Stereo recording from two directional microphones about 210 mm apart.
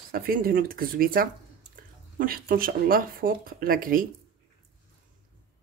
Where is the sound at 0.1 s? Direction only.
45° right (ahead or behind).